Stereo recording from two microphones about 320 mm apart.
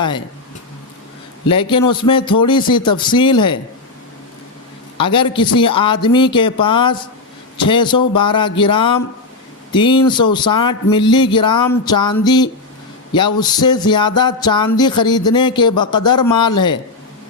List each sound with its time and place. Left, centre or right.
1.5 s speech: centre
4.9 s speech: centre